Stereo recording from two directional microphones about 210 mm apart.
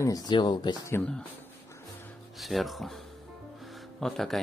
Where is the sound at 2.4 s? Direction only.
Centre (ahead or behind).